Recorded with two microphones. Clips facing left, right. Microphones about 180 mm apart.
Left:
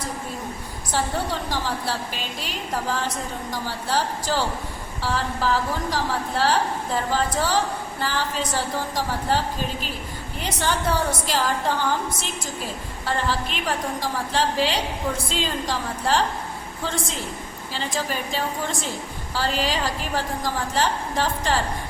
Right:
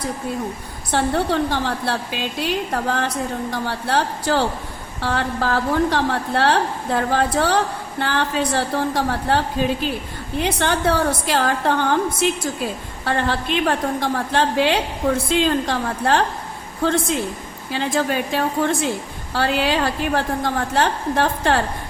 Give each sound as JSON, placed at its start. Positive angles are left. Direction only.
{"t": 0.9, "sound": "a woman's voice", "side_deg": -65}
{"t": 13.1, "sound": "a woman's voice", "side_deg": -60}